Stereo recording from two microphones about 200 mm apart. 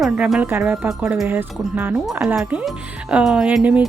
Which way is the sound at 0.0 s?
5° right (ahead or behind).